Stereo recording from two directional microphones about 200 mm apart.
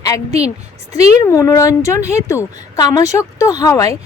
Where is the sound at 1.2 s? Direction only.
15° left (ahead or behind).